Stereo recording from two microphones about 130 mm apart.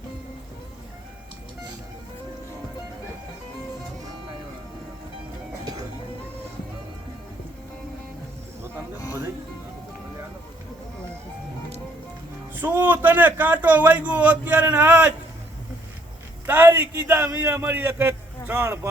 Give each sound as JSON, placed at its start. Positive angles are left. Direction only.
{"t": 12.5, "sound": "a man's voice", "side_deg": -15}
{"t": 16.5, "sound": "a man's voice", "side_deg": -15}